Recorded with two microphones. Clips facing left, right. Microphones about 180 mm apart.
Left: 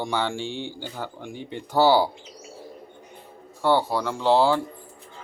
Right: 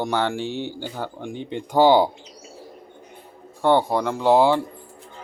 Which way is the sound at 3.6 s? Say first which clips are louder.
Right 3 dB; 20° right (ahead or behind).